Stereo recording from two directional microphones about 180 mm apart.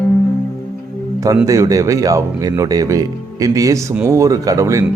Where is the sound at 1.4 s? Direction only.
20° right (ahead or behind).